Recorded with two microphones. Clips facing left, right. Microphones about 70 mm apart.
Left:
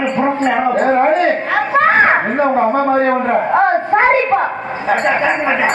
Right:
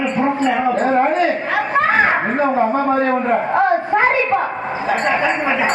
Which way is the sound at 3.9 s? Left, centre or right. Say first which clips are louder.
Left 6 dB; left.